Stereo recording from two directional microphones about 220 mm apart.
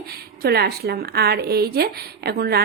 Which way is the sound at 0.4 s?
45° right (ahead or behind).